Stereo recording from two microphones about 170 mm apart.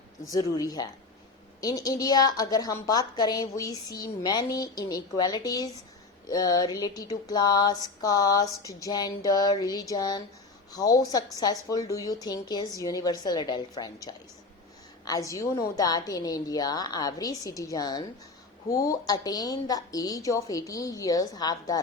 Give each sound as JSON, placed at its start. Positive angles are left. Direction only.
{"t": 0.5, "sound": "speech", "side_deg": 20}